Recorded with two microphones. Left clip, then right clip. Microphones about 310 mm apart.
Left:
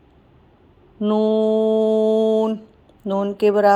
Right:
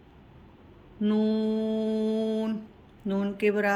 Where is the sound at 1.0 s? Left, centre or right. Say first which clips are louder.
Left 10 dB; left.